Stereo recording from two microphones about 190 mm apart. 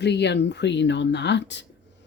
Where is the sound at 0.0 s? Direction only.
65° left (ahead or behind).